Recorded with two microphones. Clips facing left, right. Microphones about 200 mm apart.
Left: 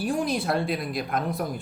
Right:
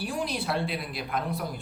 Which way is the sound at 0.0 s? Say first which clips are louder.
Left 5 dB; 45° left (ahead or behind).